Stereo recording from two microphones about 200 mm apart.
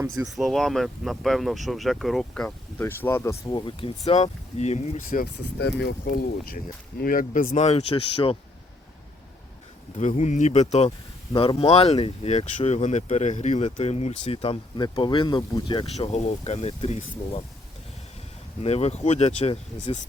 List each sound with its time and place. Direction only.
0.3 s speech: centre (ahead or behind); by 8.4 s 25° left (ahead or behind)
10.0 s speech: 35° left (ahead or behind)
18.6 s speech: 30° left (ahead or behind)